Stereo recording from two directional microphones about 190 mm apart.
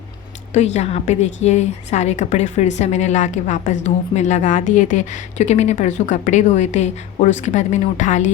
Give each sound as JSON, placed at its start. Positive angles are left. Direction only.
{"t": 0.5, "sound": "a woman's voice", "side_deg": 35}